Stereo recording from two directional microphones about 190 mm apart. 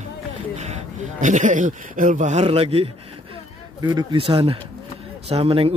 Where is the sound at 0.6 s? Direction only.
35° right (ahead or behind).